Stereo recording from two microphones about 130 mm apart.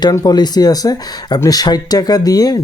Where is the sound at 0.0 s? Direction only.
30° left (ahead or behind).